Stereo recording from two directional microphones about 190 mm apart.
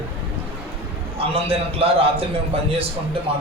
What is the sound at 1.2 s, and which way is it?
A man's voice, 30° right (ahead or behind).